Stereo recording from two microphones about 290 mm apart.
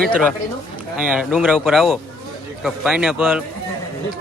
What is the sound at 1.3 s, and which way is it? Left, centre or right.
A man's voice, centre.